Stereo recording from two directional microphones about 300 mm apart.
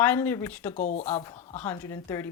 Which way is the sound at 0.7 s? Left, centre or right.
Left.